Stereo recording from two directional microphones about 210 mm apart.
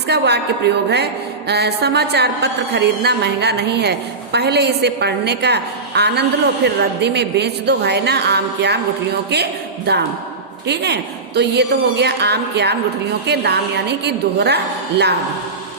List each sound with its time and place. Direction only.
0.1 s a woman's voice: 50° right (ahead or behind)